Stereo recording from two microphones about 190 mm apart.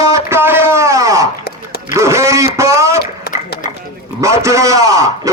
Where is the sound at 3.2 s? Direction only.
45° left (ahead or behind).